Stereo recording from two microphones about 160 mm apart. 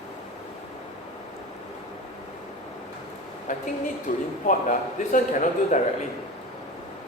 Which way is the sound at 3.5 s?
50° left (ahead or behind).